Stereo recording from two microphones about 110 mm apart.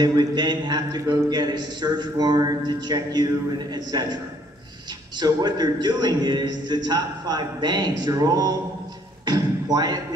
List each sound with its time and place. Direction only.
0.0 s a man's voice: 40° right (ahead or behind)
9.2 s beatboxing: 35° right (ahead or behind)